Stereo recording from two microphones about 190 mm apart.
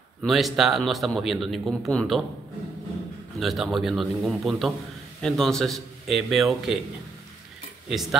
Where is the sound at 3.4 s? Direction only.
Centre (ahead or behind).